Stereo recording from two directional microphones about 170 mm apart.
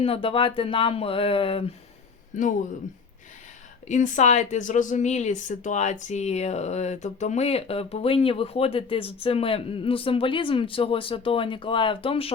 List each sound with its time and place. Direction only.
0.0 s speech: 35° left (ahead or behind)
2.3 s speech: 45° left (ahead or behind)
3.8 s speech: 45° left (ahead or behind)